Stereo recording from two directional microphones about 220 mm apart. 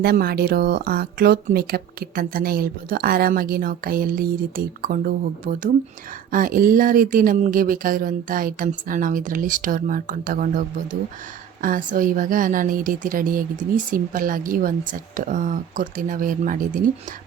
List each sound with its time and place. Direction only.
0.0 s a woman's voice: 45° right (ahead or behind)